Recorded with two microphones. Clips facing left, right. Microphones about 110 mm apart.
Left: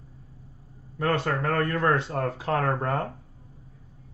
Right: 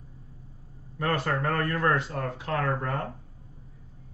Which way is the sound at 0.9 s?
25° left (ahead or behind).